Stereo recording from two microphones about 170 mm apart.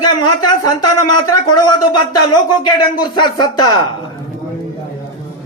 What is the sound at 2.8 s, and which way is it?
A man's voice, 25° left (ahead or behind).